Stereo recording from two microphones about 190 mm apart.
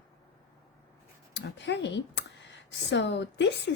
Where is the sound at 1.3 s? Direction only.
70° left (ahead or behind).